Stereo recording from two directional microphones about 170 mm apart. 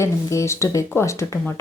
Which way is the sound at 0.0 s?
15° left (ahead or behind).